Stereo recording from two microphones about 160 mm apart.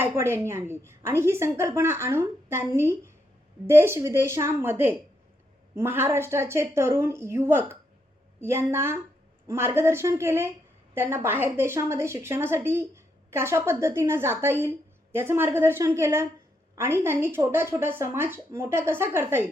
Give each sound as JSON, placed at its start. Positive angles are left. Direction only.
{"t": 0.0, "sound": "a woman's voice", "side_deg": -15}